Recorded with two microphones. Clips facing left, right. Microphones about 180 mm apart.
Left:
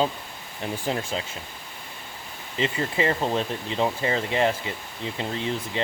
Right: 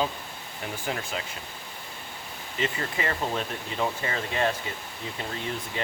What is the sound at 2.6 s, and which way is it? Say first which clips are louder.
Speech: left 5 dB; 25° left (ahead or behind).